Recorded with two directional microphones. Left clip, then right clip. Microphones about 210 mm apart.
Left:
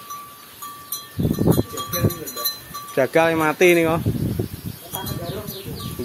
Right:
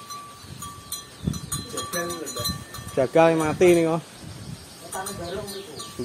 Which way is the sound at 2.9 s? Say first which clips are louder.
Left 1 dB; 15° left (ahead or behind).